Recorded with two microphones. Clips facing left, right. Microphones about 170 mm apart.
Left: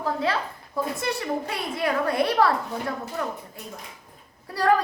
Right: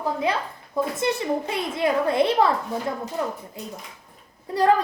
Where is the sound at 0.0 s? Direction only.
15° right (ahead or behind).